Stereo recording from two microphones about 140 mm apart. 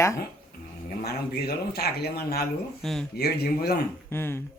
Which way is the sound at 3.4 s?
90° left.